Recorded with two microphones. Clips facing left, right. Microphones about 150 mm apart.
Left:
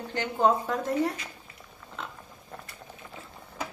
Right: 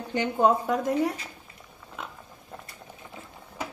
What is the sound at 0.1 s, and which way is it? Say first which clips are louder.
A woman's voice: right 2 dB; 15° right (ahead or behind).